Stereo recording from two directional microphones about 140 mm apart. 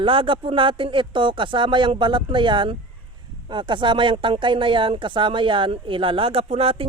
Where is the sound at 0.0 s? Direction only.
40° right (ahead or behind).